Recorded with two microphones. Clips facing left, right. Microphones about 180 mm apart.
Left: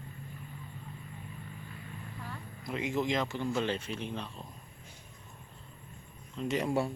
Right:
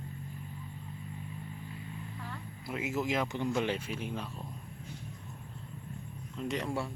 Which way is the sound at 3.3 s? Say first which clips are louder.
Even; 15° right (ahead or behind).